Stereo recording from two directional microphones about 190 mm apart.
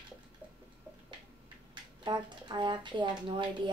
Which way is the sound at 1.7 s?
25° right (ahead or behind).